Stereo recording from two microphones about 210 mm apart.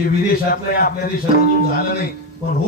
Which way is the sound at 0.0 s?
45° left (ahead or behind).